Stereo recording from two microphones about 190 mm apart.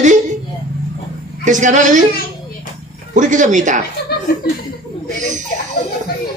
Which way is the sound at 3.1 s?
40° right (ahead or behind).